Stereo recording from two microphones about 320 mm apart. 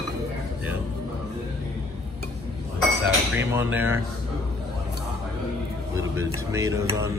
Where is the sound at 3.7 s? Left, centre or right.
Centre.